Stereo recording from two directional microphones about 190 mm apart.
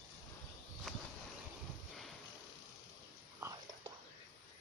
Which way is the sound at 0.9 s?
Centre (ahead or behind).